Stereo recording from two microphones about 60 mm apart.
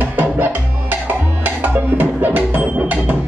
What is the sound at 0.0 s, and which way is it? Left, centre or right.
Music, right.